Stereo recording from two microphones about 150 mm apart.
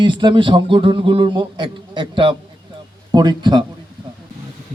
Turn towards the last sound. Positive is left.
turn(degrees=-30)  # may be behind; listen again after turning